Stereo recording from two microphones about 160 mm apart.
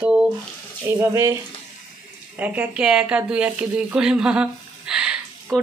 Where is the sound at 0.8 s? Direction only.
15° right (ahead or behind).